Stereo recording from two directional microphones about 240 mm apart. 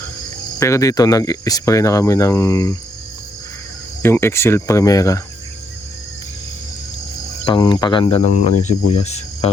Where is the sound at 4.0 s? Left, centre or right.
Centre.